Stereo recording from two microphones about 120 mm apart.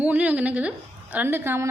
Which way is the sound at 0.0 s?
10° right (ahead or behind).